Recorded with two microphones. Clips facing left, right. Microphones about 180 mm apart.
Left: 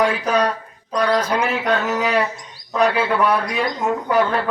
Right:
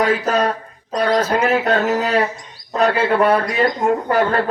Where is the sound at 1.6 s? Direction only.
50° right (ahead or behind).